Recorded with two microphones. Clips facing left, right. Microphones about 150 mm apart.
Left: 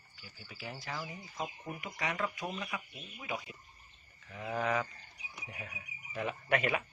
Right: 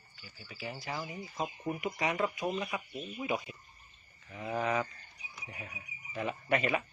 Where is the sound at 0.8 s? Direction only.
15° right (ahead or behind).